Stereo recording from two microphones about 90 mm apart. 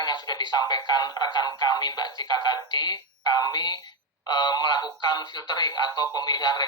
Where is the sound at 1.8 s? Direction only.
50° left (ahead or behind).